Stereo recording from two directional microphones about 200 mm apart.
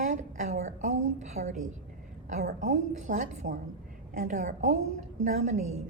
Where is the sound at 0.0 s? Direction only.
40° right (ahead or behind).